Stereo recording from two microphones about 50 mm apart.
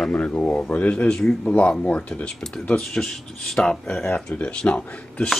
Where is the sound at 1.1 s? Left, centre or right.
Centre.